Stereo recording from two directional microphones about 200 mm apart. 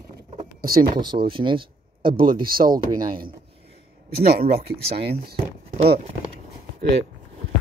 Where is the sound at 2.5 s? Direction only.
45° right (ahead or behind).